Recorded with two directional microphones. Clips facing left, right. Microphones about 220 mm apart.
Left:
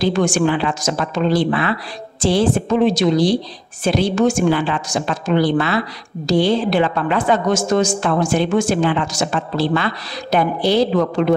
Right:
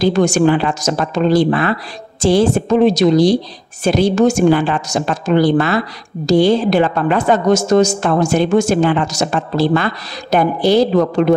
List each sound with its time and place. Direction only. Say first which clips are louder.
0.0 s a woman's voice: right 4 dB; 40° right (ahead or behind)